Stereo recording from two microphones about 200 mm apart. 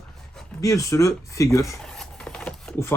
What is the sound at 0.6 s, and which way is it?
Speech, 15° left (ahead or behind).